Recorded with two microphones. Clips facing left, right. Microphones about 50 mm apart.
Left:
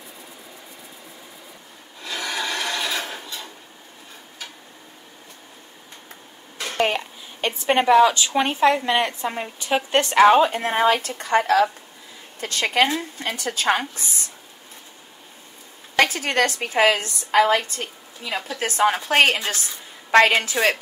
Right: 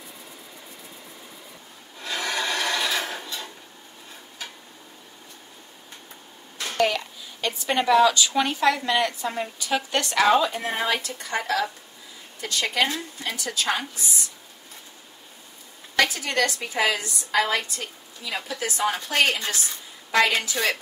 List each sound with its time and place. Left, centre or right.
2.0 s filing: centre
7.4 s a woman's voice: left
16.0 s a woman's voice: left
20.1 s a woman's voice: left
20.3 s a woman's voice: left